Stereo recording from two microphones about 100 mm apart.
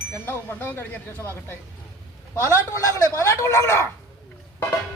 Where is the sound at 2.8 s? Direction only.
30° left (ahead or behind).